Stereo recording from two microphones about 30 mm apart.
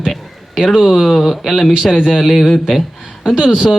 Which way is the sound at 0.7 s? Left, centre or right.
Centre.